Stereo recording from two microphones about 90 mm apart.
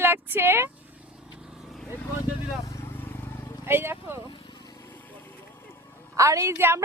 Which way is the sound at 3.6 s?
25° right (ahead or behind).